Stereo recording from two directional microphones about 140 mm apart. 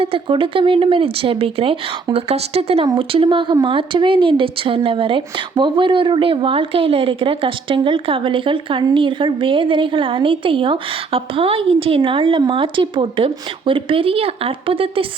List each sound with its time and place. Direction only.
0.0 s speech: 40° right (ahead or behind)